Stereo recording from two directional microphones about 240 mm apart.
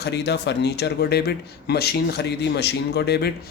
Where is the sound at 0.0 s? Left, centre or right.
Left.